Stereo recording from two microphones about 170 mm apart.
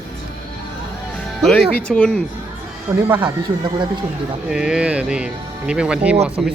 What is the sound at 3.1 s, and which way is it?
Speech, 10° right (ahead or behind).